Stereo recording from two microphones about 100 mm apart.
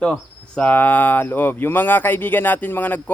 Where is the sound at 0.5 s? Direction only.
15° left (ahead or behind).